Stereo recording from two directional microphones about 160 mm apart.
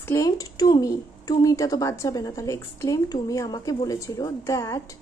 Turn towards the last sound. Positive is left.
turn(degrees=20)  # may be behind; listen again after turning